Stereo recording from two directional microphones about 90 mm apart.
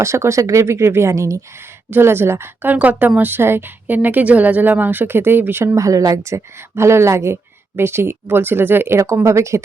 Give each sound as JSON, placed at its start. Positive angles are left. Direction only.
{"t": 0.0, "sound": "speech", "side_deg": -30}
{"t": 5.7, "sound": "speech", "side_deg": -35}